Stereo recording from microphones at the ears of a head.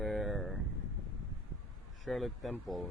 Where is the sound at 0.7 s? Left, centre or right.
Left.